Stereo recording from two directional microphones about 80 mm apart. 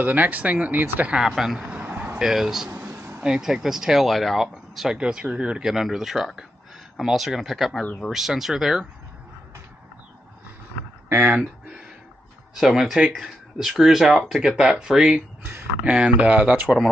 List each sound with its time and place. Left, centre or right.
0.0 s speech: right
1.1 s speech: centre
2.2 s speech: centre
2.8 s a sound: right
3.2 s speech: centre
11.2 s speech: centre
12.5 s speech: centre
16.6 s speech: centre